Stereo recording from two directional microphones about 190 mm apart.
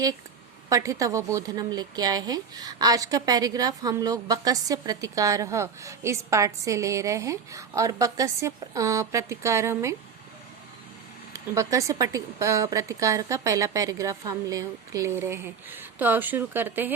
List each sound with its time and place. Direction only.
0.7 s a woman's voice: 15° right (ahead or behind)
11.3 s a woman's voice: 15° right (ahead or behind)